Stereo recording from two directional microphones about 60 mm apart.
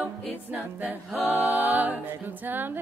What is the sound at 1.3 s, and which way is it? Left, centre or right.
Music, right.